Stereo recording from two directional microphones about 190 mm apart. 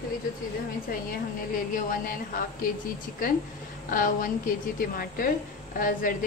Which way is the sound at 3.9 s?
45° left (ahead or behind).